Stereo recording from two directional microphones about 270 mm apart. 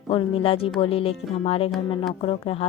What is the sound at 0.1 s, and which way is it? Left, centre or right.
Speech, centre.